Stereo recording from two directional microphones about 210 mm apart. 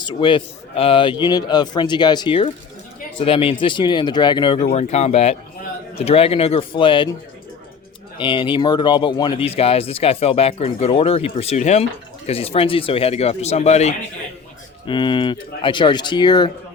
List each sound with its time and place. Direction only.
0.0 s speech: 25° left (ahead or behind)
8.2 s speech: 25° left (ahead or behind)